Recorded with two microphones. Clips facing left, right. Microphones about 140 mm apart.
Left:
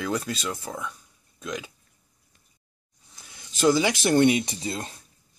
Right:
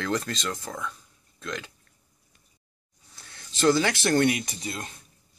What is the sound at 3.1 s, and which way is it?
Speech, 10° left (ahead or behind).